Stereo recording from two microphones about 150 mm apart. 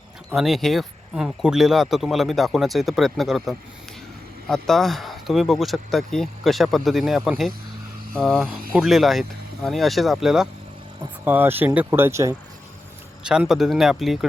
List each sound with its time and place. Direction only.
0.3 s speech: centre (ahead or behind)
11.3 s speech: 15° right (ahead or behind)
13.2 s speech: 5° right (ahead or behind)